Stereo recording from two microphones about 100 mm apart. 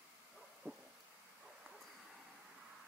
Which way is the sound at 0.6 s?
20° right (ahead or behind).